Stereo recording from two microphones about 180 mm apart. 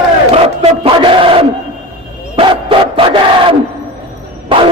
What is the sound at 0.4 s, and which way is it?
Battle cry, 35° right (ahead or behind).